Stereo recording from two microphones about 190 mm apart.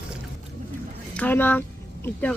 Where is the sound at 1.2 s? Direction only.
10° left (ahead or behind).